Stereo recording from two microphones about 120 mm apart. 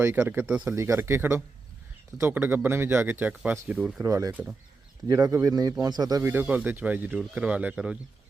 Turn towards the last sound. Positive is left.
turn(degrees=-10)  # may be behind; listen again after turning